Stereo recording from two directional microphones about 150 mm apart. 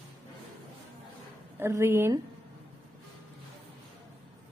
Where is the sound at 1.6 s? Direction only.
15° right (ahead or behind).